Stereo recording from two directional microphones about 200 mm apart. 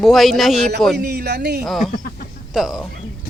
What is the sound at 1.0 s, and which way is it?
Speech, 55° right (ahead or behind).